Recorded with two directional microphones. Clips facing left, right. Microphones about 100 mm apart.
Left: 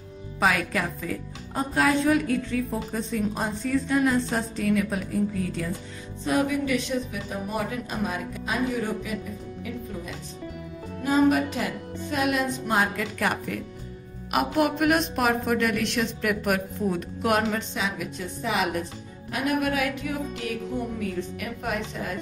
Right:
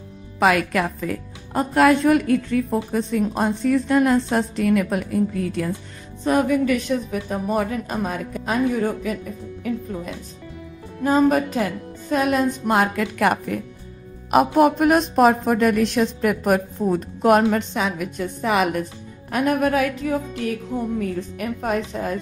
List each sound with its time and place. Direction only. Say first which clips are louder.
0.4 s a woman's voice: right 6 dB; 65° right (ahead or behind)
6.2 s music: right 6 dB; 50° right (ahead or behind)
11.1 s music: right 4 dB; 40° right (ahead or behind)
12.1 s a woman's voice: right 6 dB; 40° right (ahead or behind)
12.6 s a woman's voice: right 5 dB; 60° right (ahead or behind)
14.3 s a woman's voice: right 8 dB; 35° right (ahead or behind)
17.5 s music: right 7 dB; 55° right (ahead or behind)
19.3 s a woman's voice: right 6 dB; 45° right (ahead or behind)
21.4 s a woman's voice: right 6 dB; 35° right (ahead or behind)